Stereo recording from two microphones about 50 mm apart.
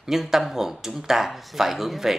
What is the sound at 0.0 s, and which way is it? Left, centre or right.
A man's voice, centre.